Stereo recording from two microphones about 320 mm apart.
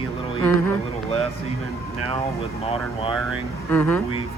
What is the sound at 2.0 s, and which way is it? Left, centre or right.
Speech, centre.